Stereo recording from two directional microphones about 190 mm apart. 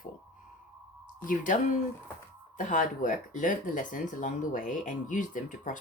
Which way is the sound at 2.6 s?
45° left (ahead or behind).